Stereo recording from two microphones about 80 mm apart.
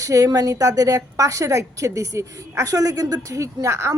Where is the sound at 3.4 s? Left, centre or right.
Right.